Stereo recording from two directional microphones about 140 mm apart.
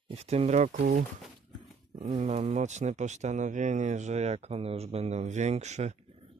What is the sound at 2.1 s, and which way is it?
Speech, 55° right (ahead or behind).